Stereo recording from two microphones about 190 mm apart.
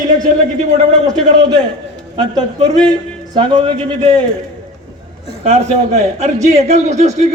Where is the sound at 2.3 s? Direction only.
25° right (ahead or behind).